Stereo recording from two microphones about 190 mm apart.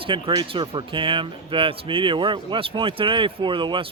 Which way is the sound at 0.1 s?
25° right (ahead or behind).